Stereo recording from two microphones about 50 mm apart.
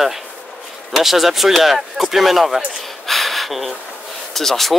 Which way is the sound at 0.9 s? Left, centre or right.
Centre.